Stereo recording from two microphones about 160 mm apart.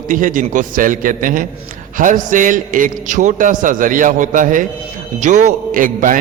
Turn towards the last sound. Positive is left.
turn(degrees=-55)  # may be behind; listen again after turning